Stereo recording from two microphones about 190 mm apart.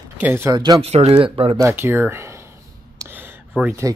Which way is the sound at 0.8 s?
35° right (ahead or behind).